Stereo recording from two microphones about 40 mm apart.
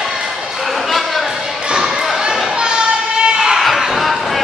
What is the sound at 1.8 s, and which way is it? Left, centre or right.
Basketball bounce, centre.